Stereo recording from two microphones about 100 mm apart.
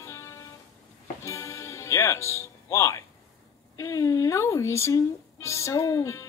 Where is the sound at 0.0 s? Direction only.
25° left (ahead or behind).